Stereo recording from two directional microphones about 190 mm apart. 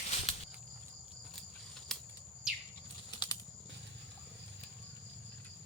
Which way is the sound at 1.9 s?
Centre (ahead or behind).